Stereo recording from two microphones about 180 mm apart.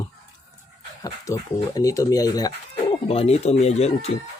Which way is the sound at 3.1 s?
35° left (ahead or behind).